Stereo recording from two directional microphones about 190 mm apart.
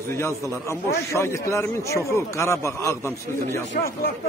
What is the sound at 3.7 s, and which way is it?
Speech, 50° left (ahead or behind).